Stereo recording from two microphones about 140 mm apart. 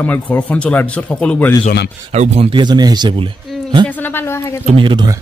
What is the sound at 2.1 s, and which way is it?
Speech, 50° right (ahead or behind).